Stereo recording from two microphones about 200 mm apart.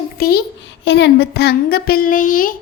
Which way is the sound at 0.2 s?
50° left (ahead or behind).